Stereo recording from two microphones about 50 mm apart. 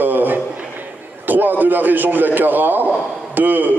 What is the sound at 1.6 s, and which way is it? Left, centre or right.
A man's voice, right.